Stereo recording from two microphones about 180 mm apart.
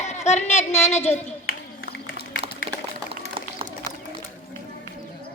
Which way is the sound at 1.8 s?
65° left (ahead or behind).